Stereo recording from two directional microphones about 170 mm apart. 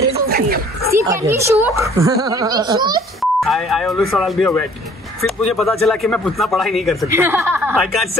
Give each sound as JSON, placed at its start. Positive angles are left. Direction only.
{"t": 0.9, "sound": "a child's voice", "side_deg": -15}
{"t": 3.2, "sound": "speech", "side_deg": 0}
{"t": 7.2, "sound": "speech", "side_deg": -15}
{"t": 7.8, "sound": "speech", "side_deg": 0}